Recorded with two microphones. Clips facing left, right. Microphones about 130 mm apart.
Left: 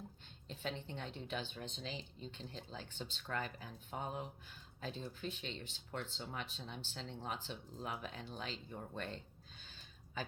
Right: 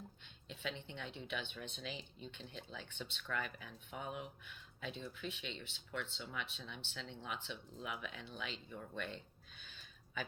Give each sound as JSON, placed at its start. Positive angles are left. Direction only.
{"t": 0.4, "sound": "speech", "side_deg": 40}